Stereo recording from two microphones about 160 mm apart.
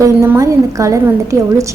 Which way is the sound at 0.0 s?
20° right (ahead or behind).